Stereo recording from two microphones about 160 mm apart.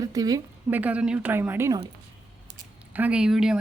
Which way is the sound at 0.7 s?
10° right (ahead or behind).